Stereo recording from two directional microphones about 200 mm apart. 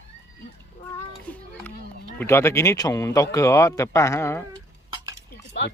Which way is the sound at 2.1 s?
15° left (ahead or behind).